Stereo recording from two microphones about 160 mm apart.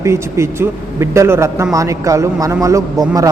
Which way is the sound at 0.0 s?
15° right (ahead or behind).